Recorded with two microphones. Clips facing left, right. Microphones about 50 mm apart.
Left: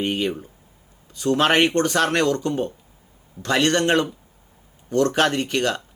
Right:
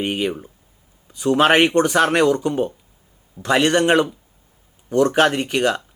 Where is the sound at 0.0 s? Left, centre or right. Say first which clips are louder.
Right 1 dB; centre.